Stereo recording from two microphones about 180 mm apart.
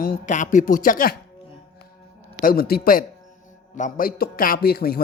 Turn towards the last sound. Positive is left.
turn(degrees=55)  # may be behind; listen again after turning